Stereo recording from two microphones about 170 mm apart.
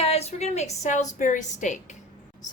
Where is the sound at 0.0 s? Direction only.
40° left (ahead or behind).